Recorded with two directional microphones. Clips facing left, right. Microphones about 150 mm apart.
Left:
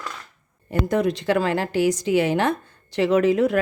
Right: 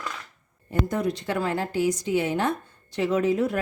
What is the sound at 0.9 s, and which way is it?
A woman's voice, 90° left.